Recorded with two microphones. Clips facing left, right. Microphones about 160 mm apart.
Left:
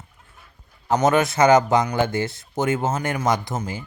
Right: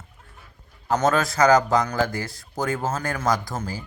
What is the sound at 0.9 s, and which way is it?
Speech, 20° left (ahead or behind).